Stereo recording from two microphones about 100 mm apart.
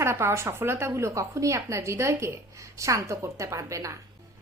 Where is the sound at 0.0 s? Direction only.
25° right (ahead or behind).